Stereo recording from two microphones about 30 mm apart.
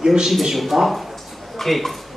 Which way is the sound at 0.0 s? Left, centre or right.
Centre.